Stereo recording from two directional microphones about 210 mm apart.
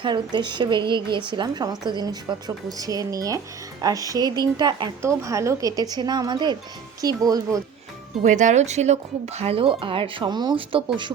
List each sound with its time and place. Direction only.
0.0 s speech: 20° right (ahead or behind)
8.2 s speech: 35° right (ahead or behind)